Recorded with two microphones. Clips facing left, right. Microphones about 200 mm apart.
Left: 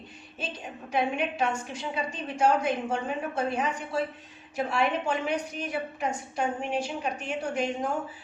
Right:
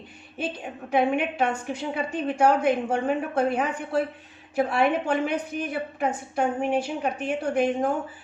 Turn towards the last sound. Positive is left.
turn(degrees=-55)  # may be behind; listen again after turning